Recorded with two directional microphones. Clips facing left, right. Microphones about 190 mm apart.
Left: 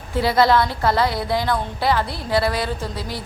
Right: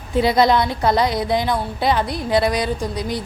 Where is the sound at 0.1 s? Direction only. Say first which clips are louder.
Right 1 dB; 20° right (ahead or behind).